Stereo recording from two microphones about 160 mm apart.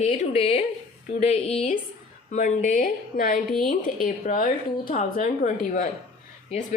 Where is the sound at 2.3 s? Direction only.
50° left (ahead or behind).